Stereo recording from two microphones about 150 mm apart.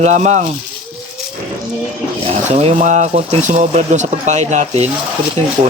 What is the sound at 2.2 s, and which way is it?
Speech, 45° right (ahead or behind).